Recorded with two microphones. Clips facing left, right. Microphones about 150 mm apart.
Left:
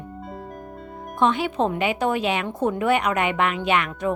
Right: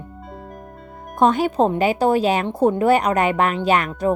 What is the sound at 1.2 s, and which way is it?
Speech, 40° right (ahead or behind).